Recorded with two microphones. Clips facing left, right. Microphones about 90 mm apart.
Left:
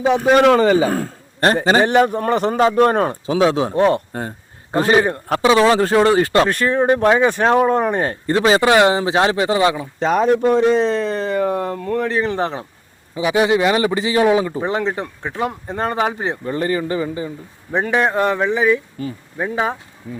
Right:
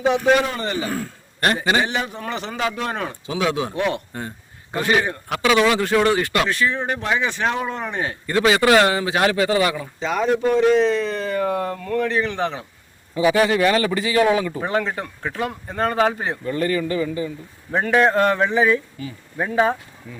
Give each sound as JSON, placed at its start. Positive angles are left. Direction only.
{"t": 0.9, "sound": "a man's voice", "side_deg": 40}
{"t": 6.5, "sound": "speech", "side_deg": 45}
{"t": 8.3, "sound": "a man's voice", "side_deg": 25}
{"t": 10.0, "sound": "speech", "side_deg": 50}
{"t": 11.3, "sound": "a man's voice", "side_deg": 25}
{"t": 13.1, "sound": "a man's voice", "side_deg": 20}
{"t": 17.7, "sound": "speech", "side_deg": 15}
{"t": 19.0, "sound": "speech", "side_deg": 40}
{"t": 19.4, "sound": "speech", "side_deg": 10}
{"t": 20.1, "sound": "speech", "side_deg": 40}